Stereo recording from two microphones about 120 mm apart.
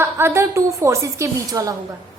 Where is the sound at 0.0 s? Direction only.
20° right (ahead or behind).